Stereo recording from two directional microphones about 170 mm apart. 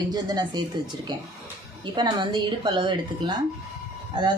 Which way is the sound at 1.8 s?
25° right (ahead or behind).